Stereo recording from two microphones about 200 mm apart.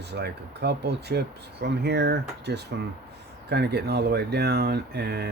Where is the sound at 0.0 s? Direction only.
55° right (ahead or behind).